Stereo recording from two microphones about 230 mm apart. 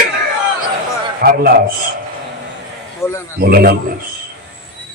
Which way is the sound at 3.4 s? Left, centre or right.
Right.